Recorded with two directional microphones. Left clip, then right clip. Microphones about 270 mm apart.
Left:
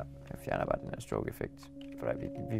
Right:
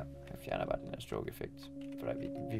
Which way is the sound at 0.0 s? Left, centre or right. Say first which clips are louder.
Left 4 dB; left.